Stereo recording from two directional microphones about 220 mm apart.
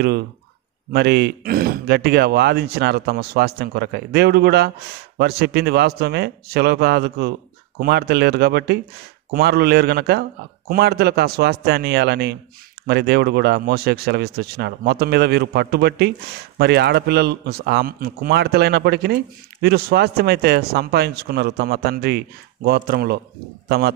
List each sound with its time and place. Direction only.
0.9 s speech: 45° right (ahead or behind)